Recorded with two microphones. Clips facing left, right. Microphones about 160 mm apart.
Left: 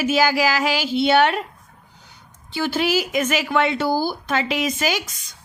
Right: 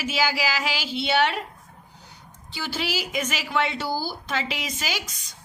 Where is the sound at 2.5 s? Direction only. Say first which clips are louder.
Left 9 dB; 55° left (ahead or behind).